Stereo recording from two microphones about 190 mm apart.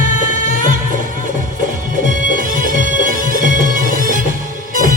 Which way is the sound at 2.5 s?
45° right (ahead or behind).